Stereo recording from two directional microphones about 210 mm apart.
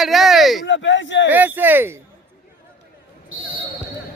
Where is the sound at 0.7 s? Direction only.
60° left (ahead or behind).